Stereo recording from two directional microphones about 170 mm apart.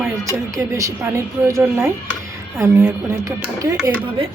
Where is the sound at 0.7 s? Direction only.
20° right (ahead or behind).